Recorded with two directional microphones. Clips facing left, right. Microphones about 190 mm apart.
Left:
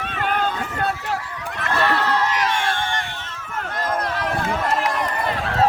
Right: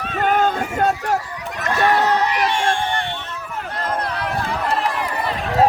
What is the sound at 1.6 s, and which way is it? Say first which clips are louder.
Neigh: right 4 dB; 45° right (ahead or behind).